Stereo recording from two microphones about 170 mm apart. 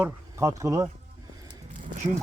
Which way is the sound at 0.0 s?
15° right (ahead or behind).